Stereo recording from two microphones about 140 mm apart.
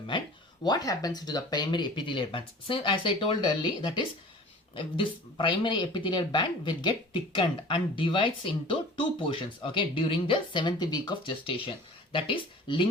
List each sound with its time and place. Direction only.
0.6 s speech: 30° left (ahead or behind)